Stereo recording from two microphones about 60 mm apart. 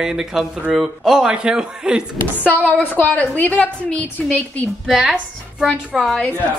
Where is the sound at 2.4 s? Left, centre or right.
Left.